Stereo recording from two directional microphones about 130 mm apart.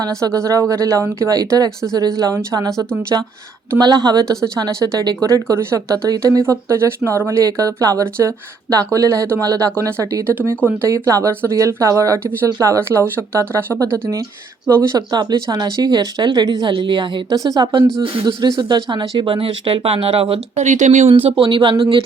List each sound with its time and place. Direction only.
0.0 s speech: 25° right (ahead or behind); by 20.7 s 50° right (ahead or behind)
20.7 s speech: 65° right (ahead or behind)
21.1 s speech: 45° right (ahead or behind)